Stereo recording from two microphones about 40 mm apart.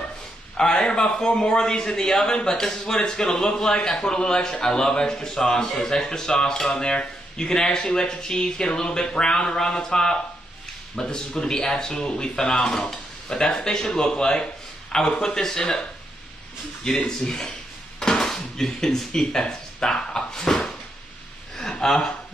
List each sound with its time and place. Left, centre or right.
0.6 s a man's voice: centre
16.8 s speech: left
17.9 s dishes: centre
18.2 s speech: centre
21.8 s a man's voice: centre